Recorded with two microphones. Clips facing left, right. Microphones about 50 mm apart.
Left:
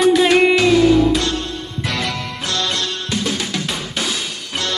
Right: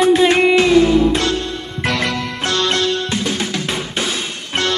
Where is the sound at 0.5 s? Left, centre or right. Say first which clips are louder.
Right 1 dB; right.